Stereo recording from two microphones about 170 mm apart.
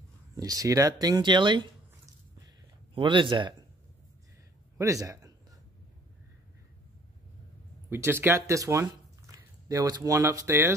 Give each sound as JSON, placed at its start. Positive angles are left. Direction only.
{"t": 0.4, "sound": "speech", "side_deg": -20}
{"t": 2.4, "sound": "a sound", "side_deg": -30}
{"t": 4.7, "sound": "speech", "side_deg": -20}
{"t": 7.9, "sound": "speech", "side_deg": -15}